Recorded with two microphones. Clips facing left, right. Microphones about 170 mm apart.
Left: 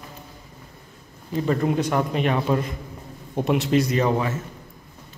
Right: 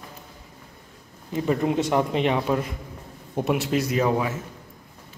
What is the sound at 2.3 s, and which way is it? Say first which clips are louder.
A man's voice: left 1 dB; 5° right (ahead or behind).